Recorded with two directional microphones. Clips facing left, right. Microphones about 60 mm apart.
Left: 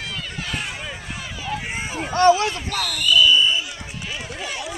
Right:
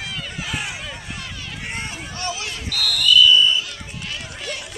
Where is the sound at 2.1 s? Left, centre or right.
Left.